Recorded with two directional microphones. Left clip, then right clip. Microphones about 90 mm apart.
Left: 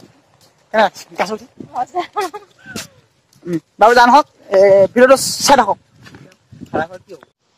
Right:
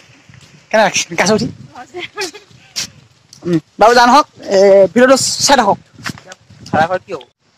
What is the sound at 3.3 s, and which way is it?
Speech, 40° right (ahead or behind).